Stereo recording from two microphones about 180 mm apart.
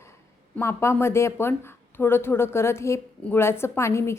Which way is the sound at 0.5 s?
15° left (ahead or behind).